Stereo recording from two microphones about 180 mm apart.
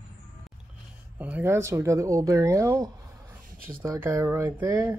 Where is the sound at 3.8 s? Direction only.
15° right (ahead or behind).